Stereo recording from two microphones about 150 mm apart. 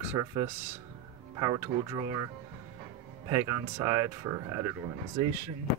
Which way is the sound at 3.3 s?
20° right (ahead or behind).